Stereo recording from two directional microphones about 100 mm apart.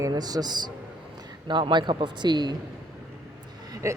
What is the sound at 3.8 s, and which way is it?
Speech, 30° right (ahead or behind).